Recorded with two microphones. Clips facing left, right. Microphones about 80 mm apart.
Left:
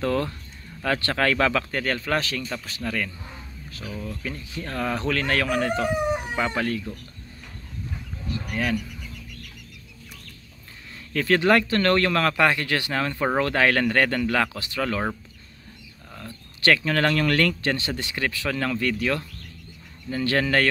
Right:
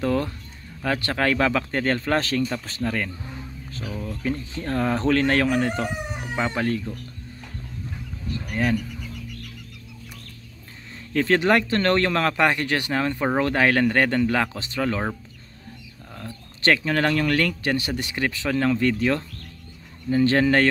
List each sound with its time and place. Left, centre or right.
0.0 s speech: centre
3.8 s speech: centre
4.1 s speech: right
11.1 s speech: right
16.6 s speech: centre